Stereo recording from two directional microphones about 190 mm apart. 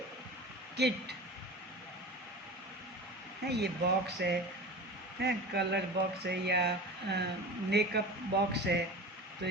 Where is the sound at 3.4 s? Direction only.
60° right (ahead or behind).